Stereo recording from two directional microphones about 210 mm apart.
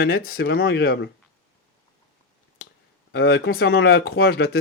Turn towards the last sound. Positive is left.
turn(degrees=50)  # may be behind; listen again after turning